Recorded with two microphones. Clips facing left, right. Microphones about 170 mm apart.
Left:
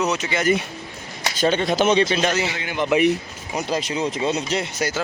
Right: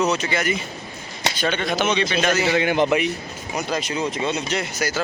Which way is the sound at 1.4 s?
35° left (ahead or behind).